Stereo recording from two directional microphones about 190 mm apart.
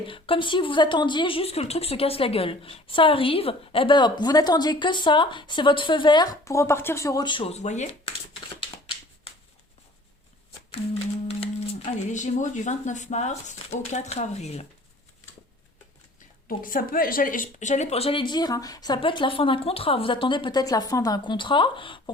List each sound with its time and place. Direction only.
0.1 s a woman's voice: 25° left (ahead or behind)
11.3 s speech: 30° left (ahead or behind)
16.5 s a woman's voice: 45° left (ahead or behind); by 22.1 s 25° left (ahead or behind)